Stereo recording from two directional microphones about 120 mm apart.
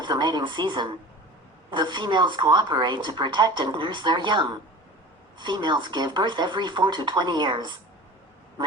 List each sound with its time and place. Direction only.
0.0 s speech: 40° right (ahead or behind)